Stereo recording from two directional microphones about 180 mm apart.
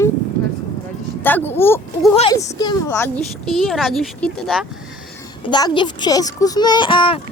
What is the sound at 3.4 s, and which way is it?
Speech, centre (ahead or behind).